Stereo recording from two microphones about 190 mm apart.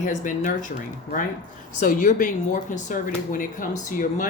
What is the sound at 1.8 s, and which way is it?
Speech, 45° left (ahead or behind).